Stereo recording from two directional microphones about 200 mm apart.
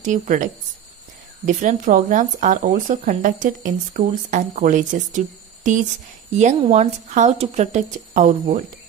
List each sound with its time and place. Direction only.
0.0 s speech: 40° right (ahead or behind)